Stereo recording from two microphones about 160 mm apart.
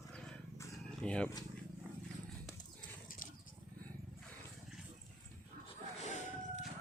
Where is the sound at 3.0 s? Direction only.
60° left (ahead or behind).